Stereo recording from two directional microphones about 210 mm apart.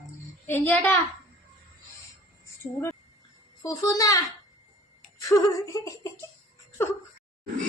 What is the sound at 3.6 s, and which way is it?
Speech, 15° left (ahead or behind).